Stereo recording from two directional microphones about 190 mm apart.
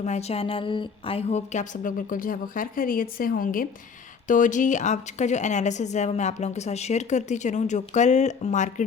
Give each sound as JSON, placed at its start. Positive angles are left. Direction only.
{"t": 0.0, "sound": "a woman's voice", "side_deg": 35}